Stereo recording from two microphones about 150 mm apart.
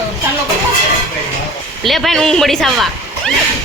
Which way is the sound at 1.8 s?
Centre (ahead or behind).